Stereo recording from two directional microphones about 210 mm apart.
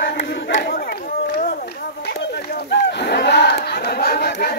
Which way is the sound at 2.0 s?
55° left (ahead or behind).